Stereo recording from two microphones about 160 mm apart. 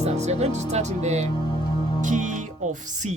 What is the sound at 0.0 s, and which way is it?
Speech, 45° right (ahead or behind).